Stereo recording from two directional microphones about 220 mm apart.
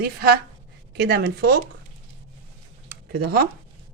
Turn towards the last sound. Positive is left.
turn(degrees=-45)  # may be behind; listen again after turning